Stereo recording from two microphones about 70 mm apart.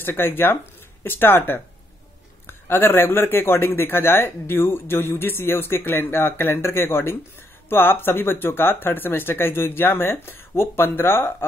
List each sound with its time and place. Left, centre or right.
0.0 s speech: left